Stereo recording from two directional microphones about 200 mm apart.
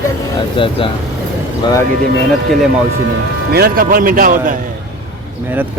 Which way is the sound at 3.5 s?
45° right (ahead or behind).